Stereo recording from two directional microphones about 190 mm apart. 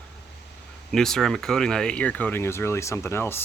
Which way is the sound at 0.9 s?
Centre (ahead or behind).